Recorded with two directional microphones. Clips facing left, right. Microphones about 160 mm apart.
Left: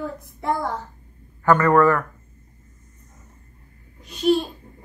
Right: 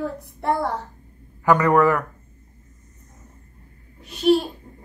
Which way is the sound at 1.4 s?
15° right (ahead or behind).